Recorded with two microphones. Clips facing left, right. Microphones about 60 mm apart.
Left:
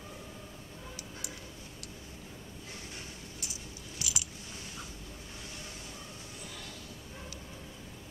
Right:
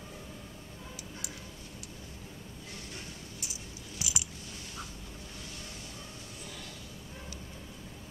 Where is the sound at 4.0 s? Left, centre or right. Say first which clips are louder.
Right 1 dB; centre.